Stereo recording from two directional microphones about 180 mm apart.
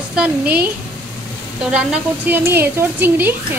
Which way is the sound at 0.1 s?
5° right (ahead or behind).